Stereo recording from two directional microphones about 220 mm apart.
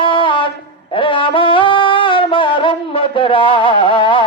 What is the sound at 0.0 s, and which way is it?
Music, 25° left (ahead or behind).